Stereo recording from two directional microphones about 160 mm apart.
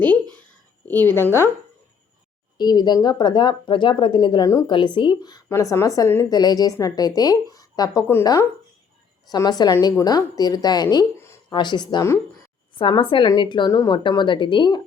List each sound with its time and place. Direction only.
0.9 s a woman's voice: 15° left (ahead or behind)
2.6 s speech: 25° left (ahead or behind)
12.7 s speech: 30° left (ahead or behind)